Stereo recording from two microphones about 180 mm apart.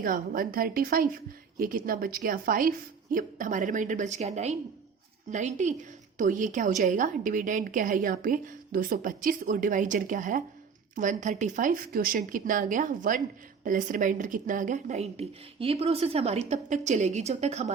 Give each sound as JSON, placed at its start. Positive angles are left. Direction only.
{"t": 0.0, "sound": "a woman's voice", "side_deg": -50}